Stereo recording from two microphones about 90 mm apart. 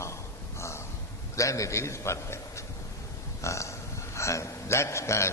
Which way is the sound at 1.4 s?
35° left (ahead or behind).